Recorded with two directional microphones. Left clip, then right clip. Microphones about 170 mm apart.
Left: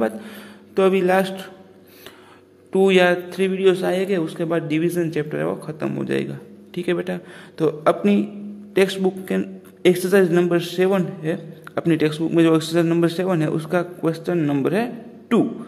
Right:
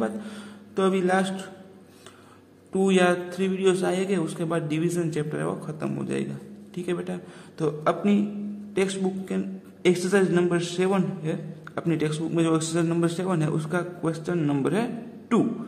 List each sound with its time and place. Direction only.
0.0 s a man's voice: 20° left (ahead or behind)
2.7 s a man's voice: 30° left (ahead or behind)